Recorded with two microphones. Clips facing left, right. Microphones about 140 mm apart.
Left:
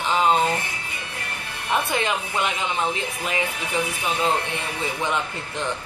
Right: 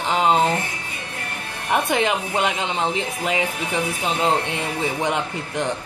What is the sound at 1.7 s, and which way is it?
Speech, 20° right (ahead or behind).